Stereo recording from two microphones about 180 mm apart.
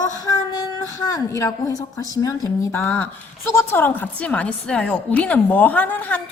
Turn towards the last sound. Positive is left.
turn(degrees=10)  # may be behind; listen again after turning